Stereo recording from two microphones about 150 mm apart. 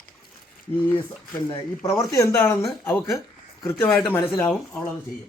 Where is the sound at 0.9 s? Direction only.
25° left (ahead or behind).